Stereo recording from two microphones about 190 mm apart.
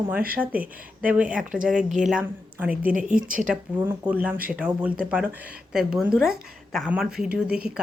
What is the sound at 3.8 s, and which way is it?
A woman's voice, 10° right (ahead or behind).